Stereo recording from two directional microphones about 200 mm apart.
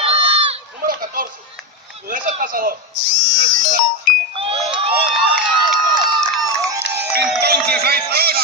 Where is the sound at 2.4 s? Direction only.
45° right (ahead or behind).